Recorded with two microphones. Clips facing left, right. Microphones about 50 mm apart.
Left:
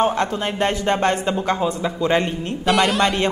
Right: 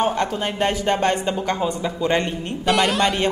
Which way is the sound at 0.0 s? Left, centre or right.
Centre.